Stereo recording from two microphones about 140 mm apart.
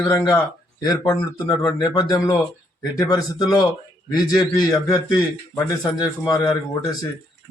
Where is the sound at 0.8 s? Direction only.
30° left (ahead or behind).